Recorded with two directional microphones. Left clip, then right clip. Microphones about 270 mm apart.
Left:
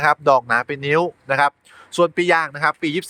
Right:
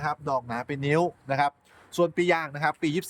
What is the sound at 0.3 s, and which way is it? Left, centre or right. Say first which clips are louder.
Speech: left 12 dB; centre.